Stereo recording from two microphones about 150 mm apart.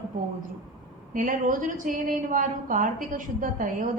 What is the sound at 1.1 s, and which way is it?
A woman's voice, 65° right (ahead or behind).